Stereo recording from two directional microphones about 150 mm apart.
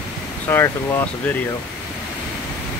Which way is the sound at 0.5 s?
15° left (ahead or behind).